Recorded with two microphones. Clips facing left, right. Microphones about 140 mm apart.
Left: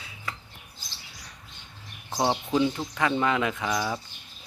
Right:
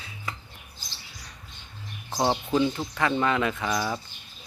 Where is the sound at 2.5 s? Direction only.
5° left (ahead or behind).